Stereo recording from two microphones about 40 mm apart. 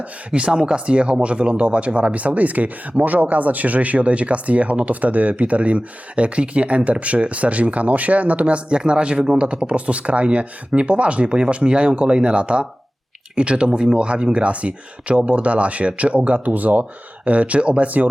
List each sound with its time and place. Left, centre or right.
0.0 s speech: right